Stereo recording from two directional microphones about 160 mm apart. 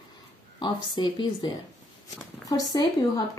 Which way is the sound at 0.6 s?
30° left (ahead or behind).